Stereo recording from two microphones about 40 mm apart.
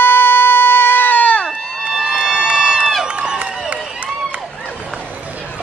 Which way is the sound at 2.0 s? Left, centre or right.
Centre.